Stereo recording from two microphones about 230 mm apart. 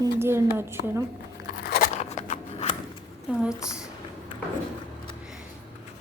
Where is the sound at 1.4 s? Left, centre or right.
Left.